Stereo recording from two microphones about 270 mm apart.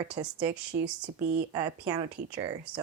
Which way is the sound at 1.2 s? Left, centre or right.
Right.